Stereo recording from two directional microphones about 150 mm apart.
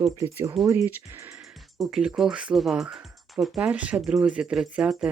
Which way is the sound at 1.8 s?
5° right (ahead or behind).